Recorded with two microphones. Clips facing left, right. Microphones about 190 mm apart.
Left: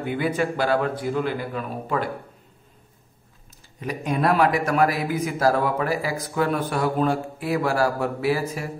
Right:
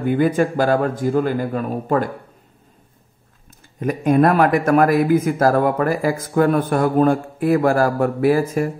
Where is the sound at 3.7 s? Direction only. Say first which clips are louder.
Right 10 dB; 50° right (ahead or behind).